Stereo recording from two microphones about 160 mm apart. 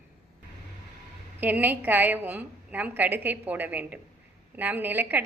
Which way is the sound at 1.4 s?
10° right (ahead or behind).